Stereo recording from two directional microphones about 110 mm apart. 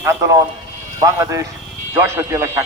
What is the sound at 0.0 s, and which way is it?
A man's voice, 25° right (ahead or behind).